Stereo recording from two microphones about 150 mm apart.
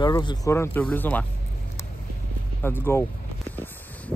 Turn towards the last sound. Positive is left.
turn(degrees=10)  # may be behind; listen again after turning